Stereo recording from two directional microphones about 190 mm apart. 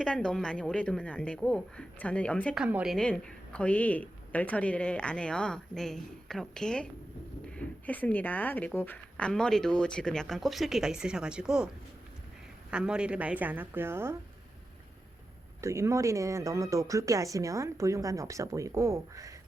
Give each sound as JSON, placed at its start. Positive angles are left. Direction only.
{"t": 0.0, "sound": "speech", "side_deg": 5}
{"t": 2.6, "sound": "speech", "side_deg": -5}
{"t": 12.7, "sound": "speech", "side_deg": -5}
{"t": 15.6, "sound": "speech", "side_deg": -15}